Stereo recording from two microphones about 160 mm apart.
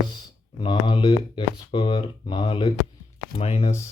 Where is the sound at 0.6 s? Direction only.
30° left (ahead or behind).